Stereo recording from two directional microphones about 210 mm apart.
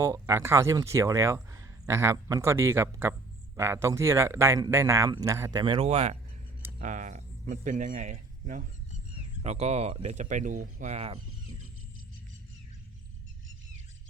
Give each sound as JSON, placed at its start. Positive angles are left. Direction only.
{"t": 0.0, "sound": "speech", "side_deg": -15}